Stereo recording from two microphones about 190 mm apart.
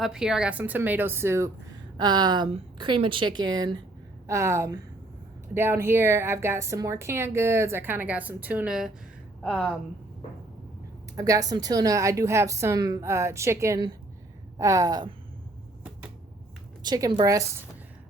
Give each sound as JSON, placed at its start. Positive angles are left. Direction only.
{"t": 0.0, "sound": "a woman's voice", "side_deg": -5}
{"t": 11.2, "sound": "a woman's voice", "side_deg": -20}
{"t": 16.8, "sound": "a woman's voice", "side_deg": -20}